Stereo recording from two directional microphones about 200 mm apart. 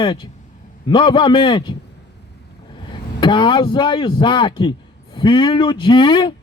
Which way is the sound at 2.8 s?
25° left (ahead or behind).